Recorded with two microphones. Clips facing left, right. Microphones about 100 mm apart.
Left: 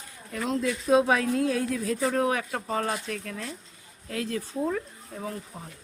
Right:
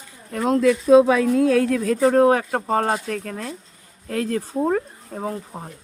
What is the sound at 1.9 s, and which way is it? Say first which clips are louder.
Speech: right 11 dB; 45° right (ahead or behind).